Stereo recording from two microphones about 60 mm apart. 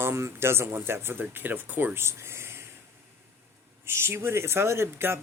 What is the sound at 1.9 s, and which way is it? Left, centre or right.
Speech, right.